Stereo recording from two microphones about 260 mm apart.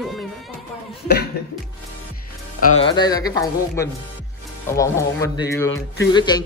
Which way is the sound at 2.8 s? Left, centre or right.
Centre.